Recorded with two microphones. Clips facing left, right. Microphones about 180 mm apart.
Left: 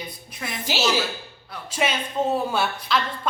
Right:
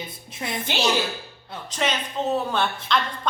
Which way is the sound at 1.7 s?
10° left (ahead or behind).